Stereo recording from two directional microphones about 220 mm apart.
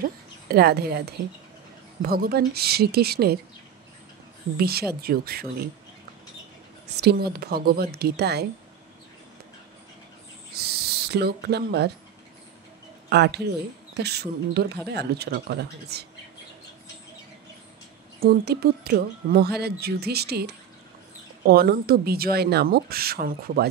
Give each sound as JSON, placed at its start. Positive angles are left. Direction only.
{"t": 0.0, "sound": "a woman's voice", "side_deg": -45}
{"t": 4.6, "sound": "speech", "side_deg": -45}
{"t": 7.0, "sound": "speech", "side_deg": -45}
{"t": 10.5, "sound": "speech", "side_deg": -45}
{"t": 13.1, "sound": "speech", "side_deg": -50}
{"t": 18.2, "sound": "speech", "side_deg": -45}